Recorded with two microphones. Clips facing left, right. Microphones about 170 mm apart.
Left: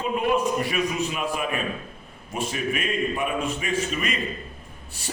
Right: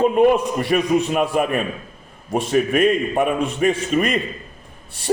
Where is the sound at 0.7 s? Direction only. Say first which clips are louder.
Right 8 dB; 60° right (ahead or behind).